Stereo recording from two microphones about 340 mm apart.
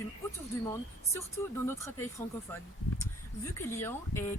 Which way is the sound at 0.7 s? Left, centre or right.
Centre.